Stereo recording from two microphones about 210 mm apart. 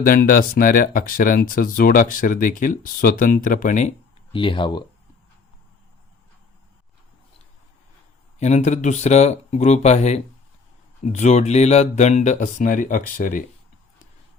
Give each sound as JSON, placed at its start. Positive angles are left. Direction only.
{"t": 0.0, "sound": "speech", "side_deg": 40}
{"t": 8.4, "sound": "speech", "side_deg": 35}